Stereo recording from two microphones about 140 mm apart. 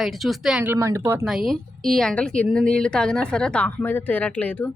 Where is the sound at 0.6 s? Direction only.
20° right (ahead or behind).